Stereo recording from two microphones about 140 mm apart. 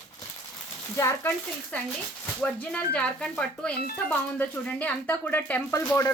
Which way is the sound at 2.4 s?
10° left (ahead or behind).